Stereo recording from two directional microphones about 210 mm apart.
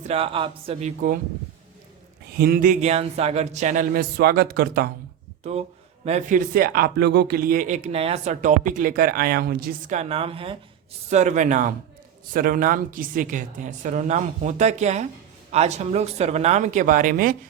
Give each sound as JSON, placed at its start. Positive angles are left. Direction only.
{"t": 0.1, "sound": "speech", "side_deg": -25}
{"t": 2.4, "sound": "speech", "side_deg": -45}
{"t": 5.4, "sound": "speech", "side_deg": -30}